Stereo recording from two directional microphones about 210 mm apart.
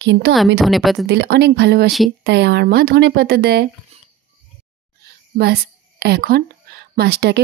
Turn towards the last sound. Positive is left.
turn(degrees=-50)  # may be behind; listen again after turning